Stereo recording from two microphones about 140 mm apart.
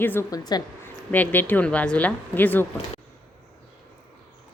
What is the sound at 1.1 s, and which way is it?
A woman's voice, 10° left (ahead or behind).